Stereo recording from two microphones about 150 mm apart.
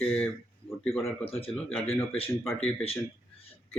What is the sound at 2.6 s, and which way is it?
Speech, 40° left (ahead or behind).